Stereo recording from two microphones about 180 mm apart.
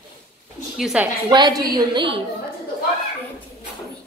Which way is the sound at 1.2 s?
25° right (ahead or behind).